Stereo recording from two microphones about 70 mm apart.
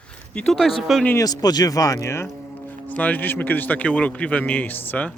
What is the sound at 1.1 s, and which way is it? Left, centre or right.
Speech, left.